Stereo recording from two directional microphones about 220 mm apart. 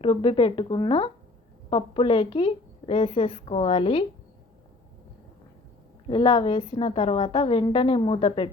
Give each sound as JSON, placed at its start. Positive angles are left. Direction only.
{"t": 0.0, "sound": "a woman's voice", "side_deg": 25}
{"t": 6.1, "sound": "a woman's voice", "side_deg": 20}